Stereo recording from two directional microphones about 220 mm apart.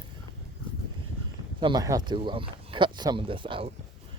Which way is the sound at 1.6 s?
15° right (ahead or behind).